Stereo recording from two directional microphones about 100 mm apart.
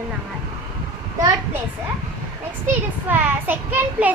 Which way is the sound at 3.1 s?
20° right (ahead or behind).